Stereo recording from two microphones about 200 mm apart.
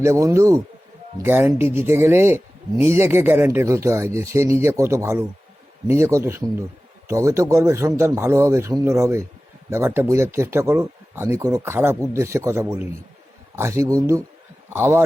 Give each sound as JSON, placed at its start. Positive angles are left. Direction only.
{"t": 0.0, "sound": "speech", "side_deg": -15}